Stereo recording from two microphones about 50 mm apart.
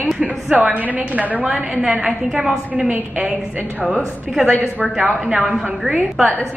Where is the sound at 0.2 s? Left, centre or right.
Right.